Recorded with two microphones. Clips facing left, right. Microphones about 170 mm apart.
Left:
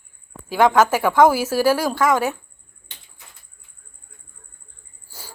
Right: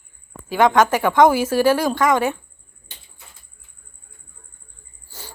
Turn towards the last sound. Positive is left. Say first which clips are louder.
# right 2 dB
turn(degrees=10)  # may be behind; listen again after turning